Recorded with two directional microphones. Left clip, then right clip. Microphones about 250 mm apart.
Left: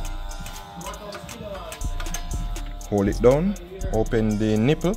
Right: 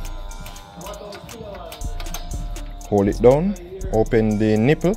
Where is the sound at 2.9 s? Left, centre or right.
Centre.